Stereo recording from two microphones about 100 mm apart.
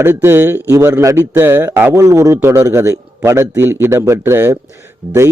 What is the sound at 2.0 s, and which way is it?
A man's voice, 30° right (ahead or behind).